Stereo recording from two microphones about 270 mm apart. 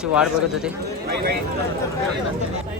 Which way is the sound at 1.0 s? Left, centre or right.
Right.